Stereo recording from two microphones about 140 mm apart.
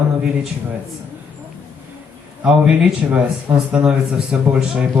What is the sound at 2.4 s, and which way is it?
A man's voice, 5° right (ahead or behind).